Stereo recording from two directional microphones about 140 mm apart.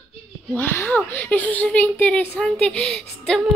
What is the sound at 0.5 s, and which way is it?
A woman's voice, 15° left (ahead or behind).